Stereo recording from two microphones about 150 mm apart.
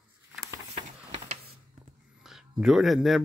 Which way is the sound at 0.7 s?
40° right (ahead or behind).